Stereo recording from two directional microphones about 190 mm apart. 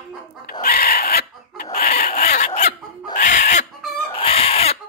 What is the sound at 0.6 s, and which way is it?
Chicken, 55° left (ahead or behind).